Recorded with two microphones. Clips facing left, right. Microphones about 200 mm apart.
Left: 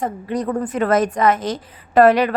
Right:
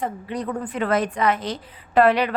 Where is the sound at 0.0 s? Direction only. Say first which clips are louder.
Left 5 dB; 45° left (ahead or behind).